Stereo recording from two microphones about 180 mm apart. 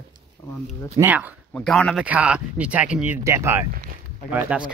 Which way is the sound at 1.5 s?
Centre (ahead or behind).